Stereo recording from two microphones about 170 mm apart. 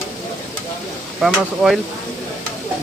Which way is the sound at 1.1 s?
Centre (ahead or behind).